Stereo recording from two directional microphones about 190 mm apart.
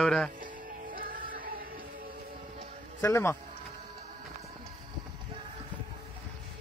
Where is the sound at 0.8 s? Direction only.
45° right (ahead or behind).